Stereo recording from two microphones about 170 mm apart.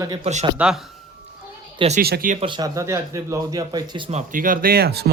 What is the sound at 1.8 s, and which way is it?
Speech, 40° right (ahead or behind).